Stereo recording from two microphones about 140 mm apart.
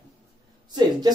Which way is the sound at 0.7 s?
30° right (ahead or behind).